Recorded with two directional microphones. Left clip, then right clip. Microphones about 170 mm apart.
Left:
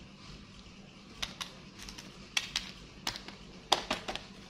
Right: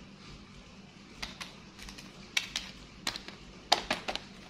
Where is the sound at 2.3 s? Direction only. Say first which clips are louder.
Right 1 dB; centre (ahead or behind).